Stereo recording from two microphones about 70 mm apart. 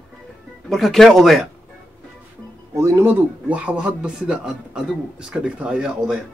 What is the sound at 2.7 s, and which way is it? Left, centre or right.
Speech, right.